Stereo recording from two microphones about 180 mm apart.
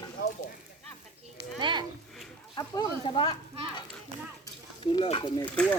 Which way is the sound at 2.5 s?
20° left (ahead or behind).